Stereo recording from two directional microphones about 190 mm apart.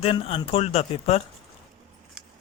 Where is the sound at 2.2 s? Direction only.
5° right (ahead or behind).